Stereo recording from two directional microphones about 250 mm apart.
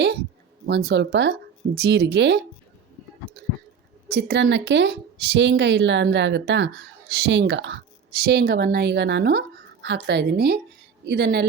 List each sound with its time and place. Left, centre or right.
0.7 s speech: right
4.1 s a woman's voice: right